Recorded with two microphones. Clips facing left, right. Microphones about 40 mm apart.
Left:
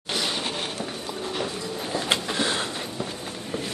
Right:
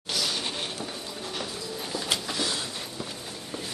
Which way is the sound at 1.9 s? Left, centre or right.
Left.